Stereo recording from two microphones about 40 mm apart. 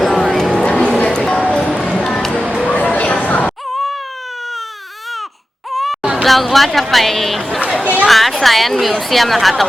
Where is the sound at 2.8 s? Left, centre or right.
Left.